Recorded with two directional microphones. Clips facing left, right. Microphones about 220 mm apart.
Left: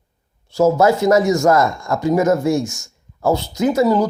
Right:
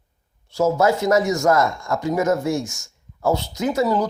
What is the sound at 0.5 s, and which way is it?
Speech, 30° left (ahead or behind).